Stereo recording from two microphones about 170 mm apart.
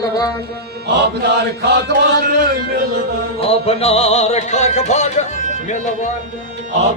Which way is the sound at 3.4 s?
35° left (ahead or behind).